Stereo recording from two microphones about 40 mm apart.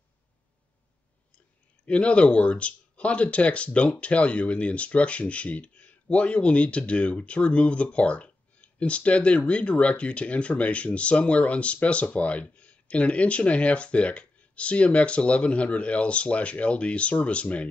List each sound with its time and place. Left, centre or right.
1.9 s speech: left